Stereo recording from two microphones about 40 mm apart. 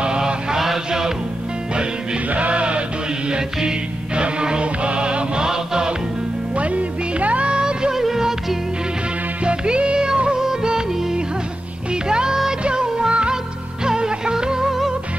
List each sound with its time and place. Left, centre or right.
0.0 s mantra: right
0.7 s music: centre
2.2 s music: right; by 5.9 s centre
6.5 s music: right
7.9 s music: centre
9.4 s music: right; by 15.0 s centre